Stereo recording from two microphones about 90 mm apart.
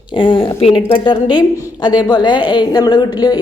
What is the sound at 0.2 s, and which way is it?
Speech, 70° left (ahead or behind).